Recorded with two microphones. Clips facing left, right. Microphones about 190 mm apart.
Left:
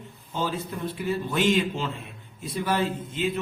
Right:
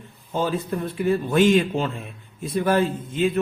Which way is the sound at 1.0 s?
50° right (ahead or behind).